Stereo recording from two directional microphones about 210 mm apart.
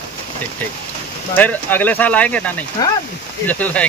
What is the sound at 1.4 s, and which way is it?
Speech, 10° left (ahead or behind).